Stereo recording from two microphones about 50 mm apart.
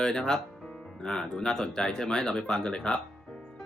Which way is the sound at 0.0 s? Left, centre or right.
Centre.